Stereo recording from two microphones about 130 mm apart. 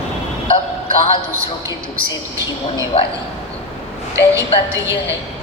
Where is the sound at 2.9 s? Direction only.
45° left (ahead or behind).